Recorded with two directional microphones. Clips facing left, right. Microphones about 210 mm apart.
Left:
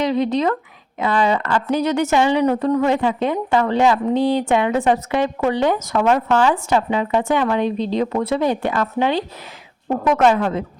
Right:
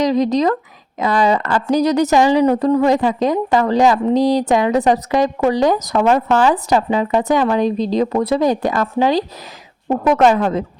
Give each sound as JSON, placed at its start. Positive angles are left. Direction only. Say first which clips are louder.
{"t": 0.0, "sound": "a woman's voice", "louder": "right 3 dB", "side_deg": -40}